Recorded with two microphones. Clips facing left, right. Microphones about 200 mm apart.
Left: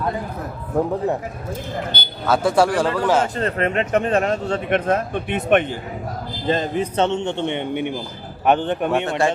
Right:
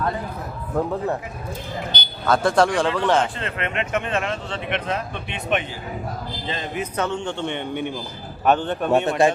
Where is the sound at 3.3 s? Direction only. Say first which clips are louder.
Left 6 dB; 40° left (ahead or behind).